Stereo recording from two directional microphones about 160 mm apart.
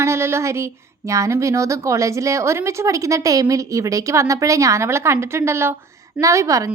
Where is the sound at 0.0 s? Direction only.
15° right (ahead or behind).